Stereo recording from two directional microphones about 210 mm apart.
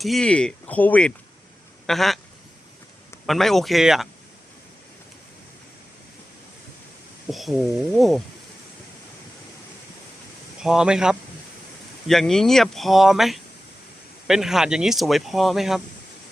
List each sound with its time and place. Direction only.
0.0 s speech: centre (ahead or behind)
3.2 s speech: centre (ahead or behind)
7.3 s speech: centre (ahead or behind)
10.6 s speech: 5° right (ahead or behind)